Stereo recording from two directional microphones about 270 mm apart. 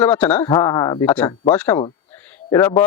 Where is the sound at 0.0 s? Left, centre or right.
Centre.